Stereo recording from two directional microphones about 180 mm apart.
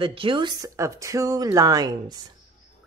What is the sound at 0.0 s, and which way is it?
Speech, 30° right (ahead or behind).